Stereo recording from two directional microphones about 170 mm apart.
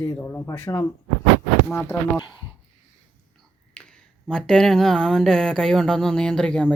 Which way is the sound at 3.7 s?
5° left (ahead or behind).